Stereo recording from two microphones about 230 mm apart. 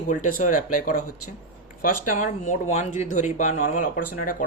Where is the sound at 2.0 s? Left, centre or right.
Left.